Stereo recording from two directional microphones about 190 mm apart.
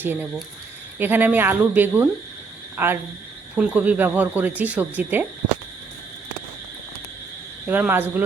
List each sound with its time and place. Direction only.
0.0 s speech: 10° right (ahead or behind)
7.7 s speech: 10° right (ahead or behind)